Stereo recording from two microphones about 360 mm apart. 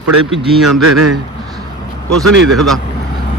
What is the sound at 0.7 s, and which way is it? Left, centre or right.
Speech, right.